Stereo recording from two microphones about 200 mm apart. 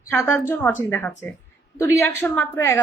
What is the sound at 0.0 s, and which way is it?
A woman's voice, 10° left (ahead or behind).